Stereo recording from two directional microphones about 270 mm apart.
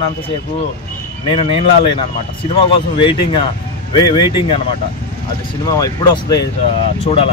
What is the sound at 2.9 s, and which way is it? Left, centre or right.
Speech, centre.